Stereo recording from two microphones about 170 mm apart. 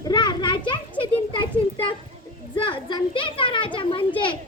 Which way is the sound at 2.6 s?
30° left (ahead or behind).